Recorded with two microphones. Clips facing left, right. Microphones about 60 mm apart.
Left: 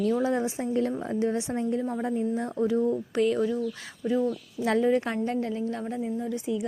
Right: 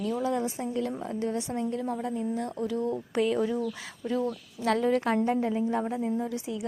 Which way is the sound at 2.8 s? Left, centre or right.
Centre.